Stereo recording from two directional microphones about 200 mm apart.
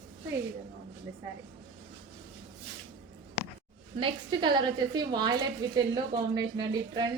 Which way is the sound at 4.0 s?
25° right (ahead or behind).